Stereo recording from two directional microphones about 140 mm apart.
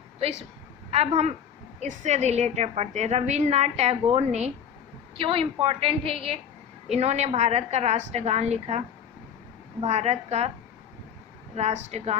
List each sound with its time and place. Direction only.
0.2 s a woman's voice: 50° right (ahead or behind)
5.1 s a woman's voice: 40° right (ahead or behind)
9.8 s a woman's voice: 50° right (ahead or behind)
11.5 s a woman's voice: 50° right (ahead or behind)